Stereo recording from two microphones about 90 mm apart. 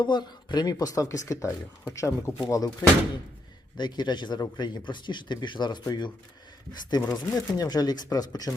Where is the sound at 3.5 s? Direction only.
55° left (ahead or behind).